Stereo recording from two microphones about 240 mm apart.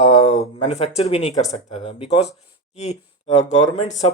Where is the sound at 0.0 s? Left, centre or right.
Left.